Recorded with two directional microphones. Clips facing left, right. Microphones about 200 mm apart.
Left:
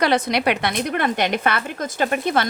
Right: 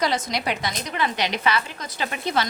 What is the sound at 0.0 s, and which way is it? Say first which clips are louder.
A woman's voice: left 6 dB; 65° left (ahead or behind).